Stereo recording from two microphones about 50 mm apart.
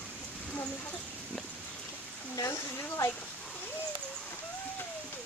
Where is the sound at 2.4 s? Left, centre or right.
Left.